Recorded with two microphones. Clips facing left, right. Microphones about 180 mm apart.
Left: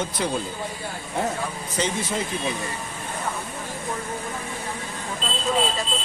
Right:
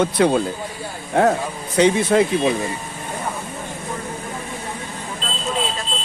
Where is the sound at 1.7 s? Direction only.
70° right (ahead or behind).